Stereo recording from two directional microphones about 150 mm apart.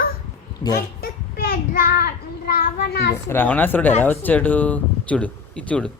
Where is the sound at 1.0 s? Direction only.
80° left.